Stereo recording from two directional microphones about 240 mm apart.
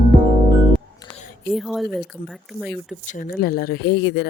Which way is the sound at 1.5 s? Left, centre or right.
Centre.